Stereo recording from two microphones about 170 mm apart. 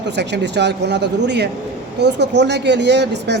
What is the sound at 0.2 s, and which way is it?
A man's voice, 90° right.